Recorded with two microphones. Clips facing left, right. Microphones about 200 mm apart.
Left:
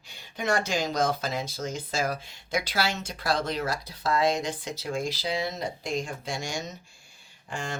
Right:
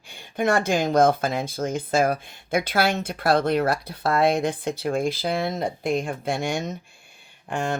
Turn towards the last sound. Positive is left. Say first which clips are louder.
# right 8 dB
turn(degrees=-60)  # may be behind; listen again after turning